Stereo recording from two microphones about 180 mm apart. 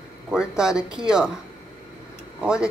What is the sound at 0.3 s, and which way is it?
Speech, 5° right (ahead or behind).